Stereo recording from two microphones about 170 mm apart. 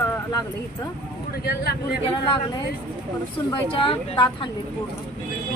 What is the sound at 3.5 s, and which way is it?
Speech, 30° left (ahead or behind).